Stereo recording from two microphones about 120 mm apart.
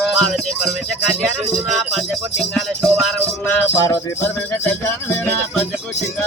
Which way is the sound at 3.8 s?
25° left (ahead or behind).